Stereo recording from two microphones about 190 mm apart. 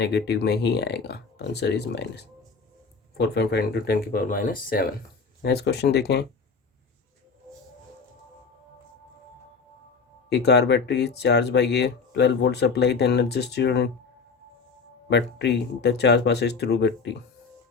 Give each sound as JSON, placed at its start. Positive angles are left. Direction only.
{"t": 0.0, "sound": "speech", "side_deg": 60}
{"t": 10.2, "sound": "speech", "side_deg": 65}
{"t": 15.1, "sound": "speech", "side_deg": 65}